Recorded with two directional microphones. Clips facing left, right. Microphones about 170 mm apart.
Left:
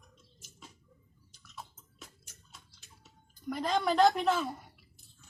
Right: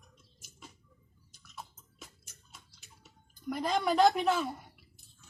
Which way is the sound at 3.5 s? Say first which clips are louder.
Even; 5° right (ahead or behind).